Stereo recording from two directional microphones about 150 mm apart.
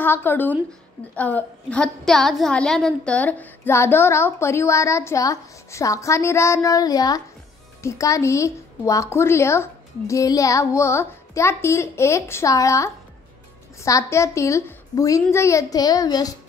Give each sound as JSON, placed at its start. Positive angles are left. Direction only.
{"t": 0.0, "sound": "a woman's voice", "side_deg": 15}